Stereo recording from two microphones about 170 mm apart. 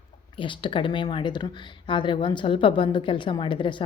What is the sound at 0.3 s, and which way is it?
A woman's voice, 30° left (ahead or behind).